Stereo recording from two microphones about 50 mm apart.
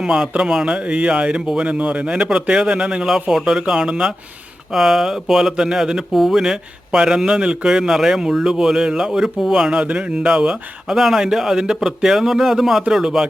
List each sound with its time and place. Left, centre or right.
0.0 s a man's voice: centre
6.4 s a man's voice: centre